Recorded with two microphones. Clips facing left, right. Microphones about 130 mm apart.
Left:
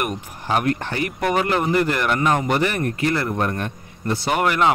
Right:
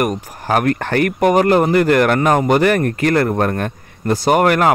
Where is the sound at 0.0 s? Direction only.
40° right (ahead or behind).